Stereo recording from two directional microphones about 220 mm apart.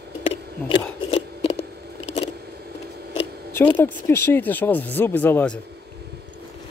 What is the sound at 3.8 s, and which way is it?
Speech, 10° left (ahead or behind).